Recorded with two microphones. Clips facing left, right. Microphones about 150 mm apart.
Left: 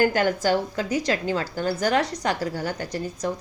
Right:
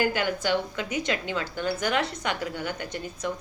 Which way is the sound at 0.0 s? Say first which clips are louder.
Left 5 dB; 45° left (ahead or behind).